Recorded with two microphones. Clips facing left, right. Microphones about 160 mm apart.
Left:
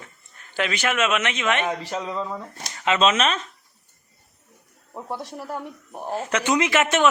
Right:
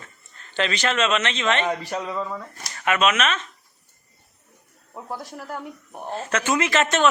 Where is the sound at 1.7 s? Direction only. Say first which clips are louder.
Right 1 dB; 15° right (ahead or behind).